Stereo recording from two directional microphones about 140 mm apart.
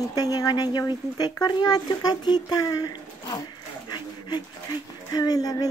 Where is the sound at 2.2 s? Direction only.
30° left (ahead or behind).